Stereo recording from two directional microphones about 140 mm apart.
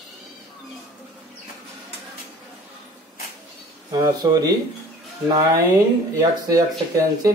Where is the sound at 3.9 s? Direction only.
25° right (ahead or behind).